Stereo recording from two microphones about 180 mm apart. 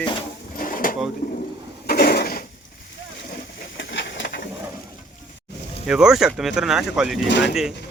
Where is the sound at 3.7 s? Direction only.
80° left.